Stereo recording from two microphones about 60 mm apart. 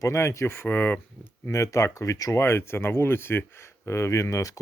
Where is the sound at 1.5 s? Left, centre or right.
Left.